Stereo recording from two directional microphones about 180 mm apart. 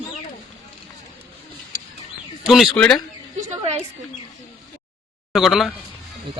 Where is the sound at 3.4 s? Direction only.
40° right (ahead or behind).